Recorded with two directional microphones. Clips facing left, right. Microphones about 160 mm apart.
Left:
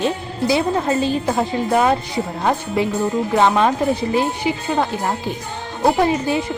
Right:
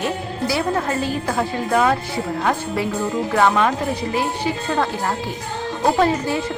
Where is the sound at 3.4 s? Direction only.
25° left (ahead or behind).